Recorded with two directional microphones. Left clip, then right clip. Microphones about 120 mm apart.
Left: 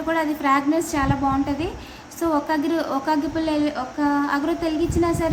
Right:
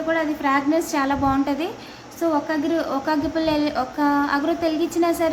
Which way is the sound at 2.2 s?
15° left (ahead or behind).